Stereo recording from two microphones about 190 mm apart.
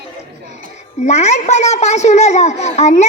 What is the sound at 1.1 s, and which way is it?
A woman's voice, 35° left (ahead or behind).